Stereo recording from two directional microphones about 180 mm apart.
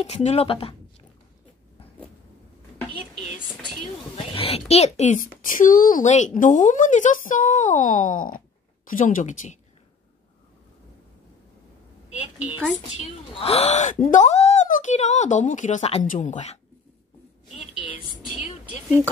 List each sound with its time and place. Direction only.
0.0 s speech: 35° left (ahead or behind)
4.3 s a woman's voice: 30° left (ahead or behind)
13.0 s speech: 35° left (ahead or behind)
15.8 s speech: 35° left (ahead or behind)
16.1 s a woman's voice: 45° left (ahead or behind)